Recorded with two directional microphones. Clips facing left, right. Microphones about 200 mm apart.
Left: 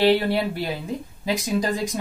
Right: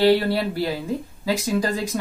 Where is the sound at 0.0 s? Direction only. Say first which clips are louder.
Right 1 dB; 20° left (ahead or behind).